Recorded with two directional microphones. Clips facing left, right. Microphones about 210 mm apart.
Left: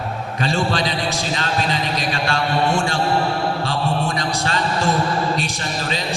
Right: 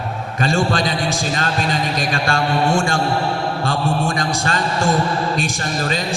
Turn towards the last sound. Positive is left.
turn(degrees=-50)  # may be behind; listen again after turning